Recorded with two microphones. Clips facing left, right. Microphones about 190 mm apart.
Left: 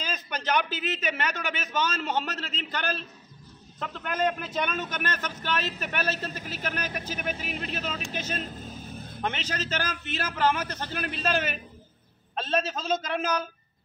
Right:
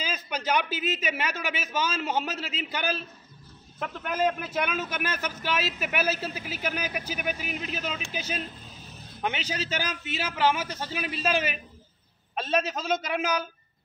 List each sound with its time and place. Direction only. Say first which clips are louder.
0.0 s a man's voice: right 1 dB; 10° right (ahead or behind)
8.4 s vehicle: left 2 dB; 50° left (ahead or behind)
9.2 s a man's voice: right 1 dB; 10° right (ahead or behind)